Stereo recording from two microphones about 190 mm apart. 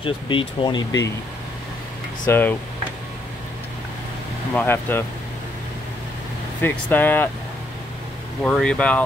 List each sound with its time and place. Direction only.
0.0 s speech: 25° left (ahead or behind)
2.2 s speech: 10° left (ahead or behind)
4.6 s speech: 10° left (ahead or behind)
6.6 s speech: 10° left (ahead or behind)
8.5 s speech: 5° left (ahead or behind)